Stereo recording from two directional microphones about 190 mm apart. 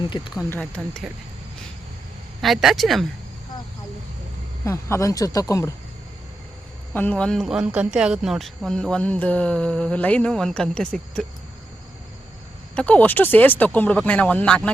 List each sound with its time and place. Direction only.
0.1 s speech: 25° left (ahead or behind)
0.8 s speech: 5° right (ahead or behind)
2.4 s speech: centre (ahead or behind)
4.6 s speech: 15° left (ahead or behind)
6.9 s speech: 5° left (ahead or behind)
12.7 s speech: 5° left (ahead or behind)